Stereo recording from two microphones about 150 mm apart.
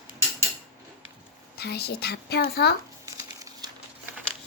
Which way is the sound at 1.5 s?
90° left.